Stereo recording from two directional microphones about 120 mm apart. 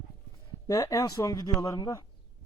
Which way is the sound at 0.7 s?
30° left (ahead or behind).